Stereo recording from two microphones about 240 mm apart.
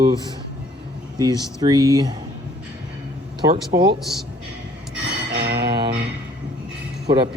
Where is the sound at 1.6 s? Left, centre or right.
Centre.